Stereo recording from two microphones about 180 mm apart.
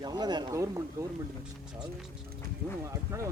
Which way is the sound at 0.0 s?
25° right (ahead or behind).